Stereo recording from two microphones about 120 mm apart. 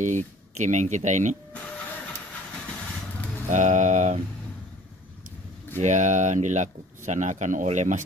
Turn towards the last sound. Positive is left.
turn(degrees=-85)